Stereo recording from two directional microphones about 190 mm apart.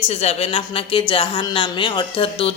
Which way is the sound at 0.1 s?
35° left (ahead or behind).